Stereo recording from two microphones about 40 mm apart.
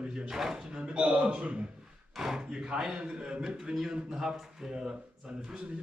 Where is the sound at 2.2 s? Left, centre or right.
Centre.